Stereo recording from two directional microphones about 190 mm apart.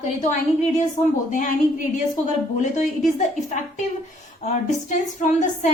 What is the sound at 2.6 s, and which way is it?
Speech, 40° left (ahead or behind).